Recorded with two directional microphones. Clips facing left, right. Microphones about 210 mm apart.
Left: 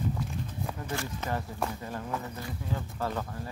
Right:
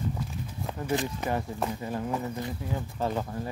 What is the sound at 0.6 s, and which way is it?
Speech, 20° right (ahead or behind).